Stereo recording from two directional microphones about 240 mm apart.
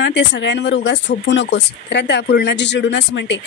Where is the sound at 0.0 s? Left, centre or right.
Left.